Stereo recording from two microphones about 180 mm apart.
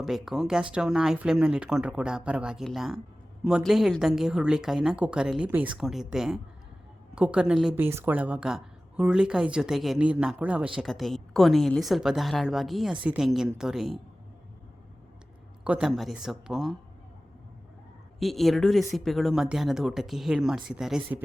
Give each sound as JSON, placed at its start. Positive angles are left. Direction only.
{"t": 0.0, "sound": "a woman's voice", "side_deg": 0}
{"t": 15.6, "sound": "a woman's voice", "side_deg": -5}
{"t": 18.2, "sound": "a woman's voice", "side_deg": 0}